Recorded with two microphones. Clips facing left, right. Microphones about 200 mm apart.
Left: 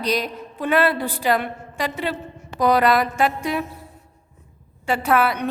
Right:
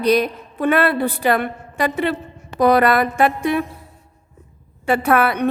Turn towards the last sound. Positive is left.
turn(degrees=-60)  # may be behind; listen again after turning